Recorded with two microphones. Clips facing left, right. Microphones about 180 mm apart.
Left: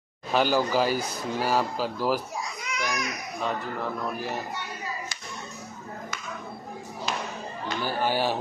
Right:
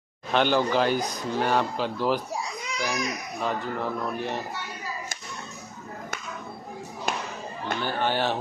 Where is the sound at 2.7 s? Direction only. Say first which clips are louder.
Right 2 dB; 30° right (ahead or behind).